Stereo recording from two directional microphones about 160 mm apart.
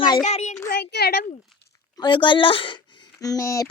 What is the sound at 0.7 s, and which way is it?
Speech, 90° left.